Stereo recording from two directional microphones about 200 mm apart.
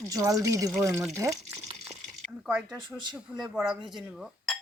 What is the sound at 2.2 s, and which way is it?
Speech, 5° right (ahead or behind).